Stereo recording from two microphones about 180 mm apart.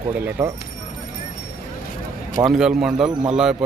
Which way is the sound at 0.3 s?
15° right (ahead or behind).